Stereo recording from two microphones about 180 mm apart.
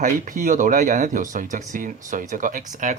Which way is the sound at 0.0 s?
45° right (ahead or behind).